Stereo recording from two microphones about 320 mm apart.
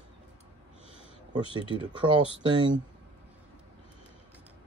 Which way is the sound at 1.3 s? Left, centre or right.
Centre.